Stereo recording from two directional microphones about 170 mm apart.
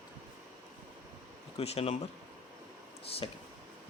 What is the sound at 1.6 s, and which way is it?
Speech, 35° left (ahead or behind).